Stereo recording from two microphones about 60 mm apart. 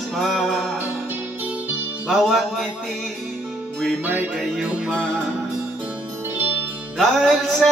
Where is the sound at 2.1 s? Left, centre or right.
Centre.